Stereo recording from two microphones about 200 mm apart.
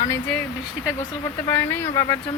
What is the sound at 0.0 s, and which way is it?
Speech, 10° left (ahead or behind).